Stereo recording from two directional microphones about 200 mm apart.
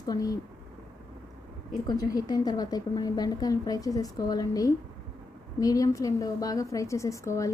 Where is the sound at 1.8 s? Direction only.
20° left (ahead or behind).